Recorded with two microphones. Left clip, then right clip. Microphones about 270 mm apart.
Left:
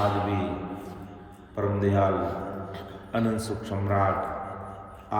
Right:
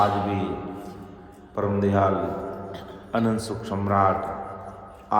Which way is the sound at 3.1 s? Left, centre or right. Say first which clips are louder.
Right 3 dB; centre.